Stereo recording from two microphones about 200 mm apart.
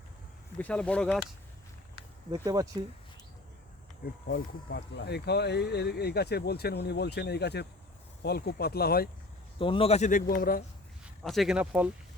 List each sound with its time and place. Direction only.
0.6 s speech: 5° left (ahead or behind)
2.3 s speech: 20° right (ahead or behind)
4.3 s speech: 60° left (ahead or behind)
9.6 s speech: 25° left (ahead or behind); by 10.6 s 45° left (ahead or behind)
11.2 s speech: centre (ahead or behind)